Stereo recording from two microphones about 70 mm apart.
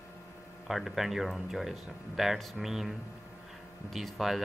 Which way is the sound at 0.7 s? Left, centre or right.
Centre.